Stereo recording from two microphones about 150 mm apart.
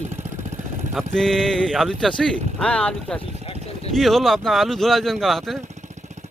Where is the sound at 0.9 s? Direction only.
5° left (ahead or behind).